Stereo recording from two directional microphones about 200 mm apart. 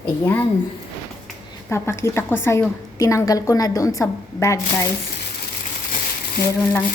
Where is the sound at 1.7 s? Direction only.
15° left (ahead or behind).